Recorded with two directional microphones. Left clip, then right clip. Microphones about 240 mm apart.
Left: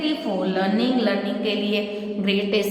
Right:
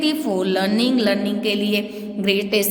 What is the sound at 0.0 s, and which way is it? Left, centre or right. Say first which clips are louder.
A woman's voice: right 3 dB; right.